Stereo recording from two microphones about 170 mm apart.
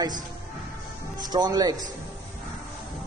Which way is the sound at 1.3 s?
25° right (ahead or behind).